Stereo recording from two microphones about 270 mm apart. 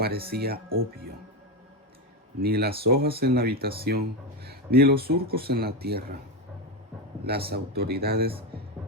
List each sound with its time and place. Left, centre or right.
0.0 s speech: right
2.4 s speech: right
7.5 s speech: right